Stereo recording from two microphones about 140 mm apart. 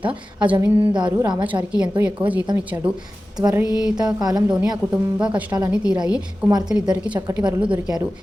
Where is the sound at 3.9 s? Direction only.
25° right (ahead or behind).